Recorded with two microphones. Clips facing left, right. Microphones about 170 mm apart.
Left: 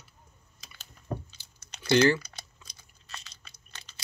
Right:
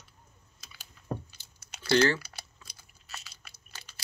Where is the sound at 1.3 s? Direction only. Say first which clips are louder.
Even; 10° right (ahead or behind).